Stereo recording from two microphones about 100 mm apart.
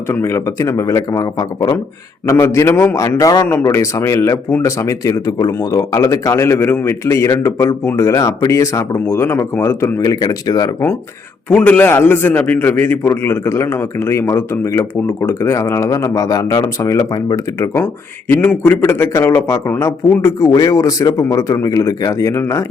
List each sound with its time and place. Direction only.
0.1 s a man's voice: 25° left (ahead or behind)
2.2 s a man's voice: 30° left (ahead or behind)
3.4 s a man's voice: 25° left (ahead or behind)
10.0 s a man's voice: 40° left (ahead or behind)
11.4 s a man's voice: 15° left (ahead or behind); by 17.8 s 35° left (ahead or behind)
18.3 s a man's voice: 20° left (ahead or behind)